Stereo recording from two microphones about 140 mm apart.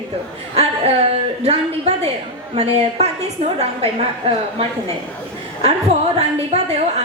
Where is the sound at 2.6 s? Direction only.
50° right (ahead or behind).